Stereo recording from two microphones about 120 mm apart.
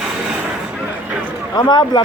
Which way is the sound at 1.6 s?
35° left (ahead or behind).